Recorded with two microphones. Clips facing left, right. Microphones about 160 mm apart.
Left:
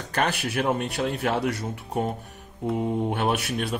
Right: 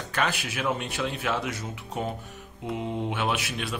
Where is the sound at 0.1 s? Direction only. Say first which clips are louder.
Left 4 dB; 60° left (ahead or behind).